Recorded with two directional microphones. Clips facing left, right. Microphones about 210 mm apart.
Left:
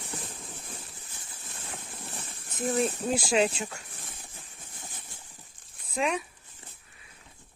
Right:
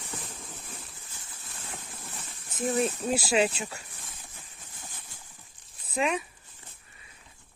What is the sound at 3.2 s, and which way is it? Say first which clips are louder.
Speech: even; 5° right (ahead or behind).